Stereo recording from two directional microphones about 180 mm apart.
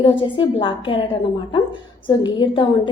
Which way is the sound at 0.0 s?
25° left (ahead or behind).